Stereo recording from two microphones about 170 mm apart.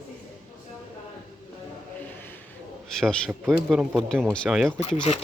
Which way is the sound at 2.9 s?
5° left (ahead or behind).